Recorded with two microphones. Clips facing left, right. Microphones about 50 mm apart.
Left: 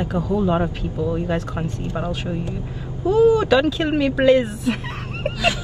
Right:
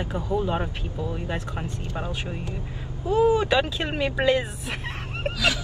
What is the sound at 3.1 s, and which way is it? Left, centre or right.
Speech, right.